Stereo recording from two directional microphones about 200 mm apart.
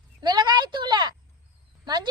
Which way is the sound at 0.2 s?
20° right (ahead or behind).